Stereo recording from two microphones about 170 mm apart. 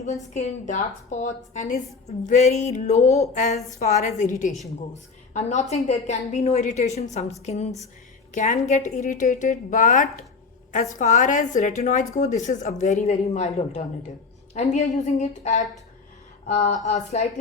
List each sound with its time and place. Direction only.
0.0 s a woman's voice: 40° left (ahead or behind)